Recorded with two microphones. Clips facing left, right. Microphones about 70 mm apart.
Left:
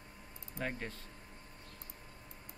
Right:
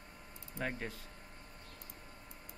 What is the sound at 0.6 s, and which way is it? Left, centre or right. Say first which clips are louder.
Speech: even; centre.